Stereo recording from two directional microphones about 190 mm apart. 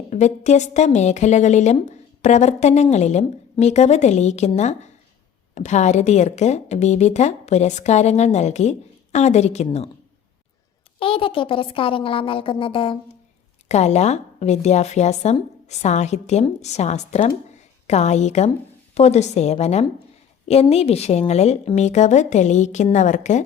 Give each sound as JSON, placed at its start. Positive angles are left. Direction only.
{"t": 0.1, "sound": "a woman's voice", "side_deg": 40}
{"t": 11.0, "sound": "a woman's voice", "side_deg": 30}